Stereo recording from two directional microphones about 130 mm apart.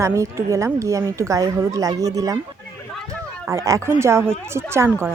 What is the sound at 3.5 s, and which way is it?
Speech, 25° right (ahead or behind).